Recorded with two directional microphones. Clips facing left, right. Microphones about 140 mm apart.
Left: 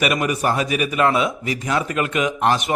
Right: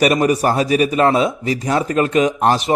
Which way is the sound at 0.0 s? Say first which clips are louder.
Right 6 dB; 35° right (ahead or behind).